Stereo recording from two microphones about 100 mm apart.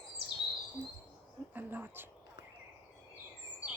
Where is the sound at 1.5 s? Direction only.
20° right (ahead or behind).